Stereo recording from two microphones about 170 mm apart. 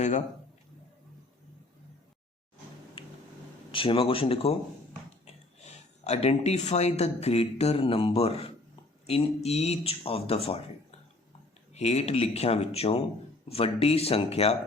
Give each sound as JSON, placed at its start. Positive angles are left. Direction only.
{"t": 3.7, "sound": "speech", "side_deg": 30}
{"t": 11.7, "sound": "speech", "side_deg": 40}